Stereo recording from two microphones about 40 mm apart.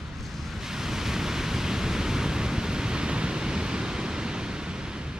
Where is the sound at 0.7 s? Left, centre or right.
Centre.